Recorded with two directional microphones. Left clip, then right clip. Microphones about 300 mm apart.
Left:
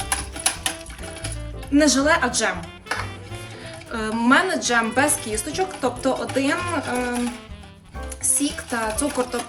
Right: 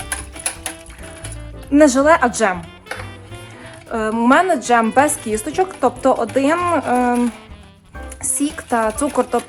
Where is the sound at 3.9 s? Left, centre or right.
Centre.